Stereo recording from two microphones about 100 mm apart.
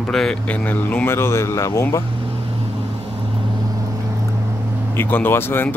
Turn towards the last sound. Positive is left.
turn(degrees=25)  # may be behind; listen again after turning